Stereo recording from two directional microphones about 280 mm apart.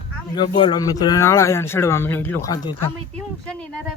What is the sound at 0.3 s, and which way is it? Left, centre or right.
Speech, centre.